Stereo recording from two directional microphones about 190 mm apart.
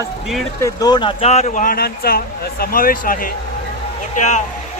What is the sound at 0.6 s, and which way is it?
A man's voice, 20° left (ahead or behind).